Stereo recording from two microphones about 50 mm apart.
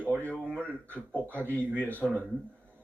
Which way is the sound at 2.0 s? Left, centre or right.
Centre.